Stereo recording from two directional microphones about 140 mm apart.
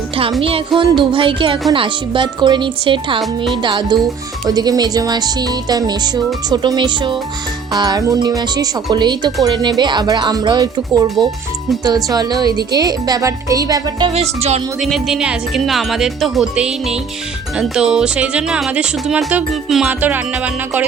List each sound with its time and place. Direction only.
0.4 s speech: 40° right (ahead or behind)
3.2 s speech: centre (ahead or behind)
3.6 s speech: 35° right (ahead or behind)
14.1 s speech: 45° right (ahead or behind)
14.8 s speech: centre (ahead or behind)